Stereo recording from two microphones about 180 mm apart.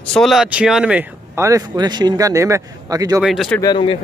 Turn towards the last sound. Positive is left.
turn(degrees=25)  # may be behind; listen again after turning